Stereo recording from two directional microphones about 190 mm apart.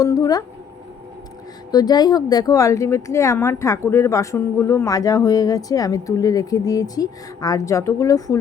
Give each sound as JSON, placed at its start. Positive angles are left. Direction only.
{"t": 0.0, "sound": "speech", "side_deg": 20}
{"t": 1.7, "sound": "a woman's voice", "side_deg": 20}